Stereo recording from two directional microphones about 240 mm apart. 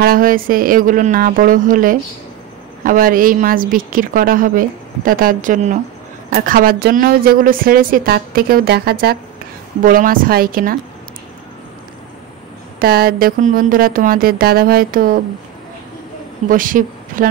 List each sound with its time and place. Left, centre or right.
0.0 s a woman's voice: right
12.7 s a woman's voice: right
16.4 s a woman's voice: right